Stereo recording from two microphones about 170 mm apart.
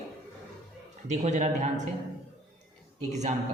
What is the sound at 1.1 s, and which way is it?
Speech, 45° right (ahead or behind).